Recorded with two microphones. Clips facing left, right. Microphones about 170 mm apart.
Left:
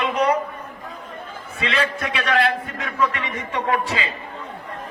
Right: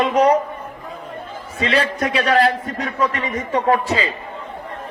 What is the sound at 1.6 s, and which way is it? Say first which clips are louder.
A man's voice: right 5 dB; 35° right (ahead or behind).